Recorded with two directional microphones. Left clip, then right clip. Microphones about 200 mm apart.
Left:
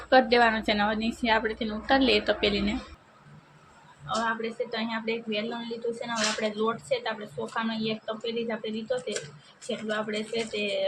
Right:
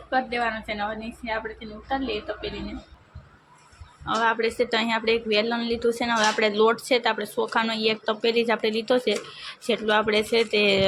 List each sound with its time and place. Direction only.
0.1 s a woman's voice: 20° left (ahead or behind)
4.0 s speech: 50° right (ahead or behind)